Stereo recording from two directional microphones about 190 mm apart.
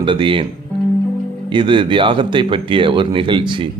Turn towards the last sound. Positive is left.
turn(degrees=-25)  # may be behind; listen again after turning